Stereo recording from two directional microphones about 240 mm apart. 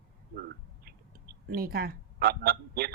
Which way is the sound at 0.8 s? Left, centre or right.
Right.